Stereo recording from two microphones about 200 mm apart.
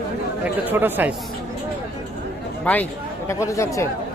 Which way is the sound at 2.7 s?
10° left (ahead or behind).